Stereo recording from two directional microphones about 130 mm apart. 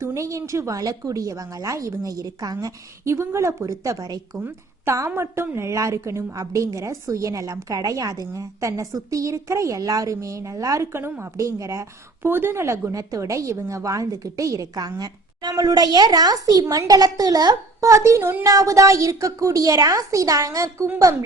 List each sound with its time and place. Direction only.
0.0 s a woman's voice: 25° right (ahead or behind)